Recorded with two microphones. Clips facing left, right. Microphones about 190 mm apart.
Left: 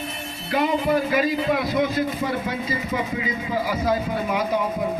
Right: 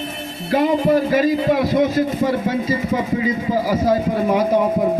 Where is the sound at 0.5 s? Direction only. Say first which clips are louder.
Right 5 dB; 35° right (ahead or behind).